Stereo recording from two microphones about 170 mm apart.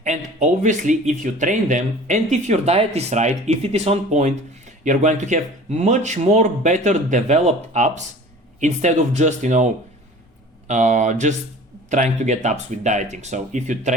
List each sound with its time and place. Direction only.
0.0 s speech: 45° right (ahead or behind)
10.7 s speech: 45° right (ahead or behind)